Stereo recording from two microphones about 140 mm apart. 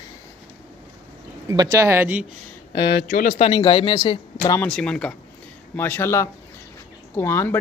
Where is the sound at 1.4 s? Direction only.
25° right (ahead or behind).